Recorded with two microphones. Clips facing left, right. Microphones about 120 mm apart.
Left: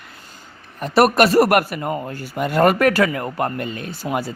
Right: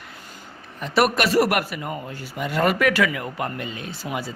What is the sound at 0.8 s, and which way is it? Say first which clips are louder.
Speech: left 6 dB; 45° left (ahead or behind).